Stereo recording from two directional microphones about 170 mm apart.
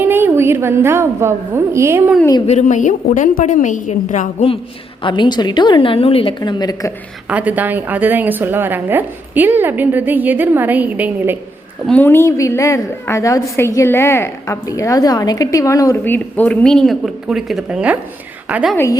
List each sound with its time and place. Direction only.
0.0 s a woman's voice: 15° right (ahead or behind)
2.5 s a woman's voice: 45° left (ahead or behind)
5.0 s a woman's voice: 25° left (ahead or behind)
7.3 s a woman's voice: 10° right (ahead or behind)
11.9 s a woman's voice: 10° left (ahead or behind); by 18.8 s 5° right (ahead or behind)